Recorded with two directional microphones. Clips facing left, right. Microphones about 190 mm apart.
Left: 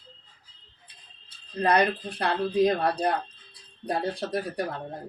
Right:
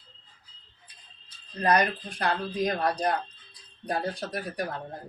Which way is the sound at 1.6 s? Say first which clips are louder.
Left 1 dB; 30° left (ahead or behind).